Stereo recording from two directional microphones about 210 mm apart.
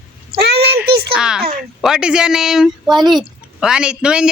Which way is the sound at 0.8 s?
50° right (ahead or behind).